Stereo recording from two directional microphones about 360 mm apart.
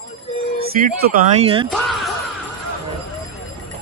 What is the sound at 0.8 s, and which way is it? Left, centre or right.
Speech, centre.